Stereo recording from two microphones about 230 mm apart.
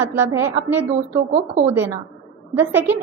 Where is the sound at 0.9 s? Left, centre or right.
Right.